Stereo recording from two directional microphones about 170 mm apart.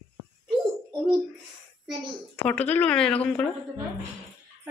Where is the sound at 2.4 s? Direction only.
10° left (ahead or behind).